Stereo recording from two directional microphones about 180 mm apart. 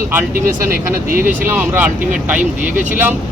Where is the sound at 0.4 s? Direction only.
15° right (ahead or behind).